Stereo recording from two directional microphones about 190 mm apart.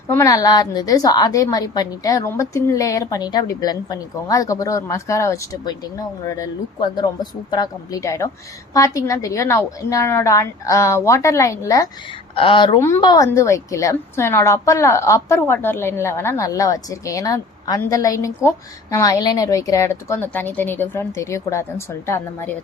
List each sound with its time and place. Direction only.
0.1 s a woman's voice: 15° left (ahead or behind)
12.3 s a woman's voice: 30° left (ahead or behind)